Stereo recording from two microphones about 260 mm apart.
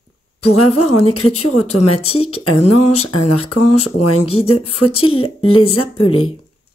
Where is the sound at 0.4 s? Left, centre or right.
Left.